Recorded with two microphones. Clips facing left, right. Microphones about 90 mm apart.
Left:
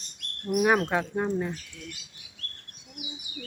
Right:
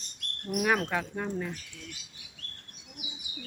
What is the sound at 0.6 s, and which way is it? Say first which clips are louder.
Speech: left 3 dB; 20° left (ahead or behind).